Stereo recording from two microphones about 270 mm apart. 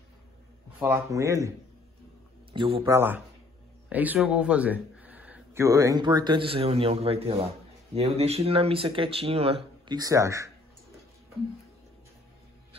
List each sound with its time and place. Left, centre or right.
0.7 s speech: centre
2.5 s speech: centre